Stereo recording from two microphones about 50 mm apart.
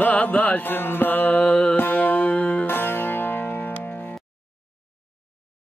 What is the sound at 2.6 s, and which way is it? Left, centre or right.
Music, left.